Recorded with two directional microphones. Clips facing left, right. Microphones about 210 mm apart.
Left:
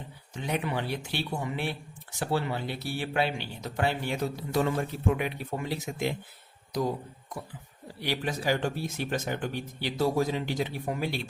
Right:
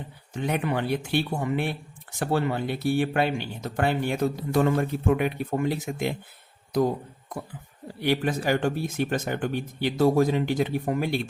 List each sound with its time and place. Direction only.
0.3 s speech: 55° right (ahead or behind)
8.0 s speech: 55° right (ahead or behind)